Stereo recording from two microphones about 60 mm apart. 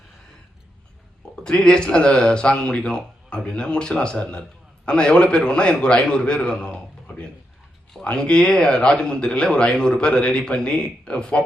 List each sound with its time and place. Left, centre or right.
1.5 s speech: centre